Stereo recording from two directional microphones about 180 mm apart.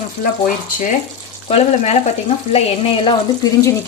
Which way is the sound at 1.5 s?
35° left (ahead or behind).